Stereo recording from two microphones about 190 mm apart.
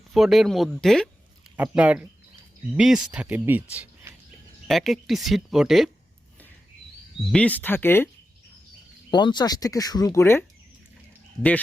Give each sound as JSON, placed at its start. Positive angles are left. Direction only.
{"t": 0.1, "sound": "speech", "side_deg": 0}
{"t": 7.3, "sound": "speech", "side_deg": 5}
{"t": 9.0, "sound": "speech", "side_deg": 25}